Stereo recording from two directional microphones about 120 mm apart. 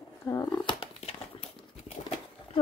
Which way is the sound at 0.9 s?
65° left (ahead or behind).